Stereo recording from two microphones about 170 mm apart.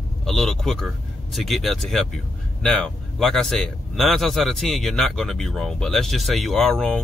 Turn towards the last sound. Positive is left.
turn(degrees=5)  # may be behind; listen again after turning